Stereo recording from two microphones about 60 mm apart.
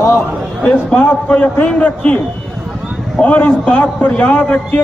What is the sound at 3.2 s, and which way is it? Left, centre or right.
A man's voice, left.